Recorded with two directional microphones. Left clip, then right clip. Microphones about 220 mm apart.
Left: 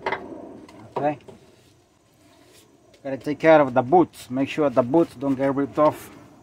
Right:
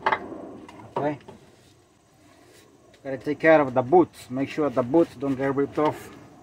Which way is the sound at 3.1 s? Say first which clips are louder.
Left 2 dB; 35° left (ahead or behind).